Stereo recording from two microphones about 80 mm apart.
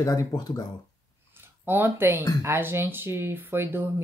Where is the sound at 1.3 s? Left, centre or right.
Right.